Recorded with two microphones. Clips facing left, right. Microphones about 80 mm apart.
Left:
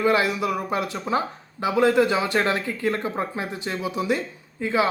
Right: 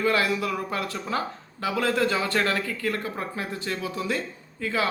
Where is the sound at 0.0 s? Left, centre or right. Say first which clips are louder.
Left 3 dB; left.